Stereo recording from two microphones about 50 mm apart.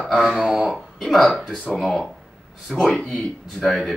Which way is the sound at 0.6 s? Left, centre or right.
Centre.